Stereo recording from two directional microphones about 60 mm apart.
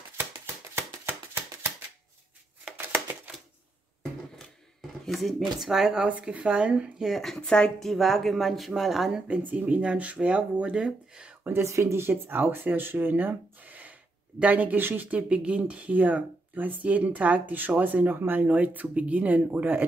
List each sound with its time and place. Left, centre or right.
0.7 s a sound: right
5.0 s speech: centre
7.1 s speech: centre
7.8 s speech: centre
9.4 s speech: right
11.5 s speech: right